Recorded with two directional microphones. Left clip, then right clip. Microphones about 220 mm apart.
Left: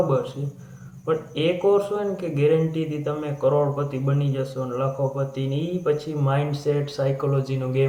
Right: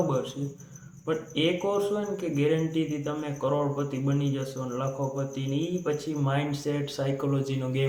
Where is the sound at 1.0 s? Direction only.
20° right (ahead or behind).